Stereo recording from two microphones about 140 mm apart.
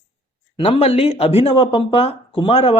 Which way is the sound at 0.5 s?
40° left (ahead or behind).